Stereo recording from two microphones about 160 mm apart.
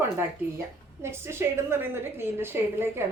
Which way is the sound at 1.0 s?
15° right (ahead or behind).